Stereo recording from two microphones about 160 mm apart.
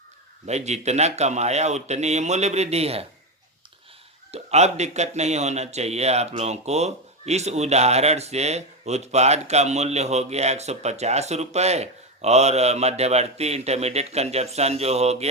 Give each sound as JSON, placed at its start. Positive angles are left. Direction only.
{"t": 0.4, "sound": "speech", "side_deg": -45}
{"t": 4.3, "sound": "speech", "side_deg": -45}